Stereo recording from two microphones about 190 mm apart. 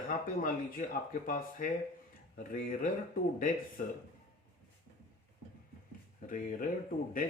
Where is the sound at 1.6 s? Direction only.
45° left (ahead or behind).